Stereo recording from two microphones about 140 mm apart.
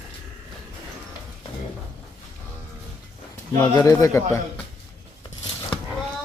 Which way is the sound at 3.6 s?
25° left (ahead or behind).